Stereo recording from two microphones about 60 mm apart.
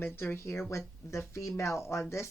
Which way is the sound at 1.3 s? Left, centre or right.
Left.